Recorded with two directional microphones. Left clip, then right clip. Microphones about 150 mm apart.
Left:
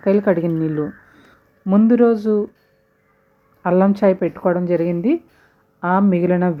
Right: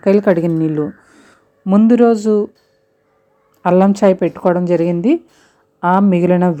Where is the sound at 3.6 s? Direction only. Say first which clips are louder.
Right 4 dB; 35° right (ahead or behind).